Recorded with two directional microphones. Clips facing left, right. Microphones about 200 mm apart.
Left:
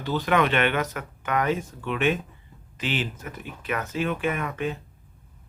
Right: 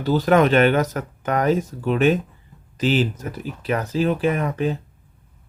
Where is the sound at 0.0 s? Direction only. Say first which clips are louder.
Right 7 dB; 40° right (ahead or behind).